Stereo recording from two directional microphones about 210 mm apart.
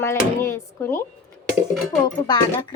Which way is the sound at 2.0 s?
20° left (ahead or behind).